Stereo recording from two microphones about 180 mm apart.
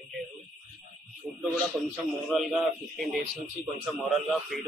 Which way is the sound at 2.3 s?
Centre (ahead or behind).